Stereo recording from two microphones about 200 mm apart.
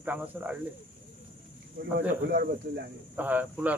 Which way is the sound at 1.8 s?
50° right (ahead or behind).